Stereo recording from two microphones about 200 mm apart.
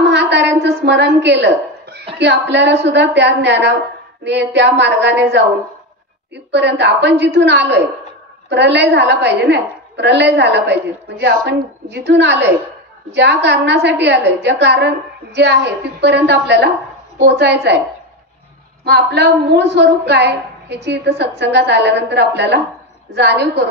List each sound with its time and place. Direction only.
0.1 s a sound: 60° right (ahead or behind)
2.1 s a woman's voice: 60° right (ahead or behind)
18.9 s a woman's voice: 60° right (ahead or behind)